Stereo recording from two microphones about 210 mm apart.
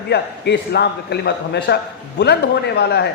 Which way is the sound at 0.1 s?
50° left (ahead or behind).